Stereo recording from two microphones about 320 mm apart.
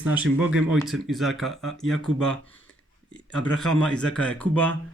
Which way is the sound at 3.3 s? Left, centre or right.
Centre.